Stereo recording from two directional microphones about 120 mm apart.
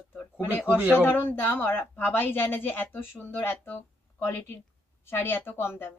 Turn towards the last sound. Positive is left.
turn(degrees=20)  # may be behind; listen again after turning